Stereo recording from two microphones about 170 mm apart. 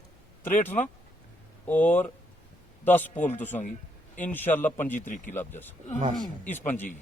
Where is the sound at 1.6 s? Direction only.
10° left (ahead or behind).